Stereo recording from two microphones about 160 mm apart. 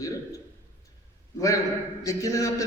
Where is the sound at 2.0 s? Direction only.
20° left (ahead or behind).